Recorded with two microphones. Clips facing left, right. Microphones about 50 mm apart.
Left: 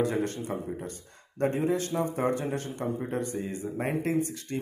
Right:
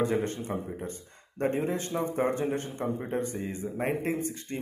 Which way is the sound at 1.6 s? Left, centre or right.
Right.